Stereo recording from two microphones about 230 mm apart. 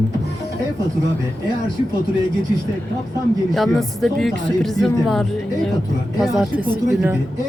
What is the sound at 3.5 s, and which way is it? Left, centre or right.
A woman's voice, centre.